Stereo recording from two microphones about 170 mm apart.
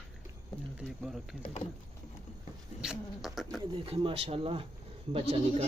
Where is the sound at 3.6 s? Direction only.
30° right (ahead or behind).